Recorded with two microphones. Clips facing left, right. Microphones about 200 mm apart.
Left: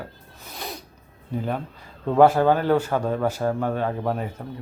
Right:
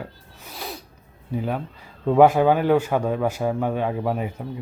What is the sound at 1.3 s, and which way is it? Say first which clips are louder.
A man's voice: right 1 dB; 5° right (ahead or behind).